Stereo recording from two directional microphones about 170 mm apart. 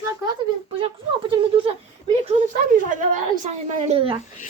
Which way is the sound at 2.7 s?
45° right (ahead or behind).